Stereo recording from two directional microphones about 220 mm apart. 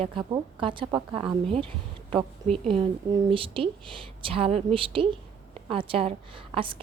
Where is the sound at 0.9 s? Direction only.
10° right (ahead or behind).